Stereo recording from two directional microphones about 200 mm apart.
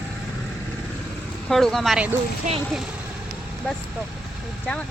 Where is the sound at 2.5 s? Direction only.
35° right (ahead or behind).